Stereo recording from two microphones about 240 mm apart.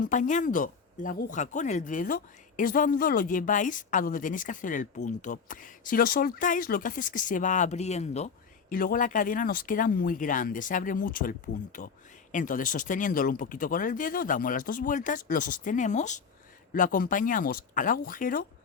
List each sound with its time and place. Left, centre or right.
0.0 s speech: left